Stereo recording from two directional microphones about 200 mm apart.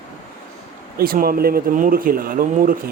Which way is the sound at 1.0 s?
45° right (ahead or behind).